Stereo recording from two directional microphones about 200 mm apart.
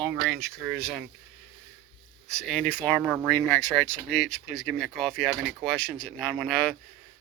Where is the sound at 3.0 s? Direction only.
5° right (ahead or behind).